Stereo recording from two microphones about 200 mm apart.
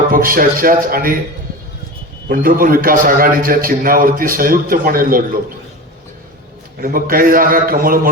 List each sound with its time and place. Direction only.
0.1 s a man's voice: 45° right (ahead or behind)
2.3 s a man's voice: 45° right (ahead or behind)
6.7 s a man's voice: 45° right (ahead or behind)